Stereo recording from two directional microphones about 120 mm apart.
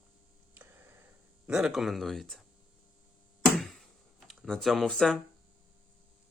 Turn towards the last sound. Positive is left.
turn(degrees=5)  # may be behind; listen again after turning